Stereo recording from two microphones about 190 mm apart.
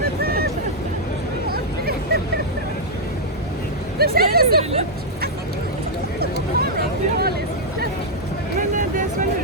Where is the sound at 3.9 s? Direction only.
55° right (ahead or behind).